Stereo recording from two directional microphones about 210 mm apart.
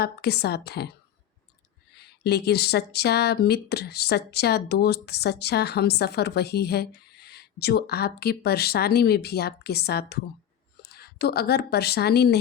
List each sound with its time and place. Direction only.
0.0 s speech: 50° left (ahead or behind)
2.0 s speech: 50° left (ahead or behind)